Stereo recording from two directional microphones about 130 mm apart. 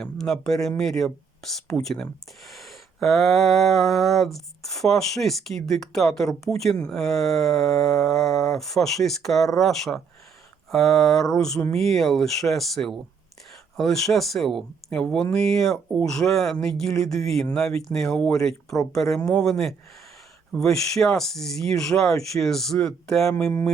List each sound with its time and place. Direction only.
0.0 s speech: 5° left (ahead or behind)
23.3 s speech: 20° left (ahead or behind)